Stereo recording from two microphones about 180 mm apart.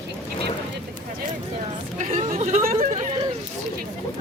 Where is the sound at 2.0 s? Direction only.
35° right (ahead or behind).